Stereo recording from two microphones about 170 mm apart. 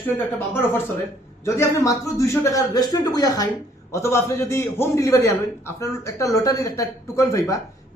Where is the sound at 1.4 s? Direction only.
15° left (ahead or behind).